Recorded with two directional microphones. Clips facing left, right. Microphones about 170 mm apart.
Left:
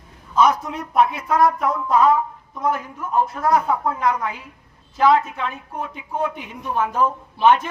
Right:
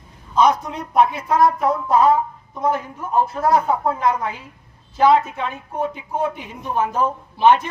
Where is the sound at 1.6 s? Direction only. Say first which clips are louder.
Right 1 dB; 30° right (ahead or behind).